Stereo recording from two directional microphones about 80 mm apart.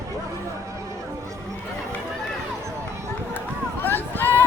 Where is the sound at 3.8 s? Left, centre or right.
Left.